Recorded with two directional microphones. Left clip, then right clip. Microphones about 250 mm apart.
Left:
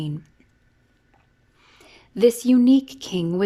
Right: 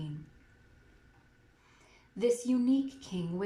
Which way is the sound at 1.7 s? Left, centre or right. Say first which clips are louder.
Left 15 dB; left.